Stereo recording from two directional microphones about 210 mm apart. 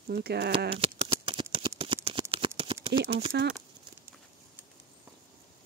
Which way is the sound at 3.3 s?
55° right (ahead or behind).